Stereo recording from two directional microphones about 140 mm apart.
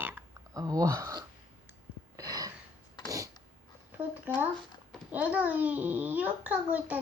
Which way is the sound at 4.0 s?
15° right (ahead or behind).